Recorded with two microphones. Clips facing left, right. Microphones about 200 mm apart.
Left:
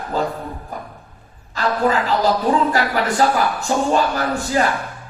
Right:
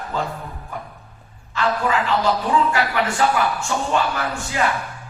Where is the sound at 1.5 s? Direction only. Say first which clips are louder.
Left 2 dB; 35° left (ahead or behind).